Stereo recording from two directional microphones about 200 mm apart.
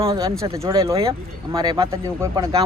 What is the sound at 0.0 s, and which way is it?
A man's voice, 25° right (ahead or behind).